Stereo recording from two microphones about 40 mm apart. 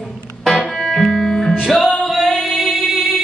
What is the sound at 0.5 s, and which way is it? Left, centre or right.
Music, centre.